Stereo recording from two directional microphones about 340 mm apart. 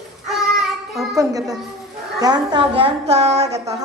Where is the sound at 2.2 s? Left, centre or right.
Centre.